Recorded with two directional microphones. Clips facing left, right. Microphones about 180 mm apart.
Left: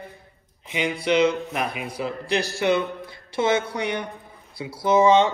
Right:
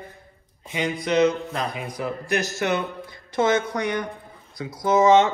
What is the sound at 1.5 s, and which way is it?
Speech, 15° left (ahead or behind).